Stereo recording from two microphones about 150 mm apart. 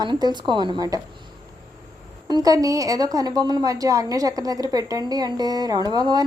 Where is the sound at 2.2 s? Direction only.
25° right (ahead or behind).